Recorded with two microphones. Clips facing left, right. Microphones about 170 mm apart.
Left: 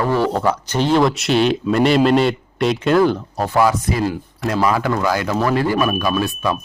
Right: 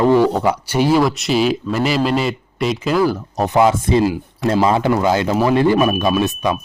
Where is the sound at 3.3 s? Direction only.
20° right (ahead or behind).